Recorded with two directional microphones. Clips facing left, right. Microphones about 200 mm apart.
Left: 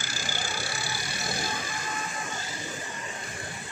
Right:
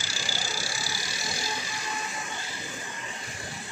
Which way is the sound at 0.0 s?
50° left (ahead or behind).